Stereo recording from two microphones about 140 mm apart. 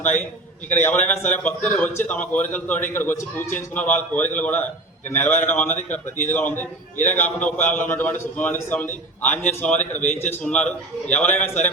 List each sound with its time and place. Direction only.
0.8 s a man's voice: 15° left (ahead or behind)
6.9 s a man's voice: 60° left (ahead or behind)
7.2 s a man's voice: 10° left (ahead or behind)
9.2 s a man's voice: 60° left (ahead or behind)
9.5 s a man's voice: 10° left (ahead or behind)